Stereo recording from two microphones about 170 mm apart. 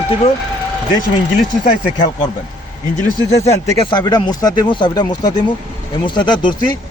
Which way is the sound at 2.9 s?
40° left (ahead or behind).